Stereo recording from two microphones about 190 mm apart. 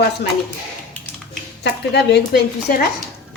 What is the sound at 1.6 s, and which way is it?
Speech, 65° left (ahead or behind).